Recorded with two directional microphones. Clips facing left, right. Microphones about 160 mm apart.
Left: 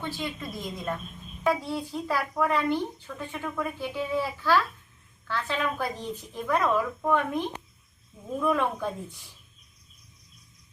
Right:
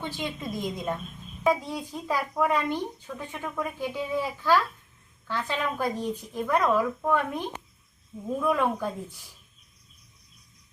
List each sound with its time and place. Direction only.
0.0 s speech: 15° right (ahead or behind)